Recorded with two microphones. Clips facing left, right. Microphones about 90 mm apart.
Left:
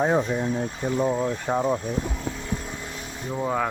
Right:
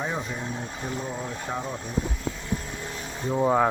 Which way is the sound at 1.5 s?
45° left (ahead or behind).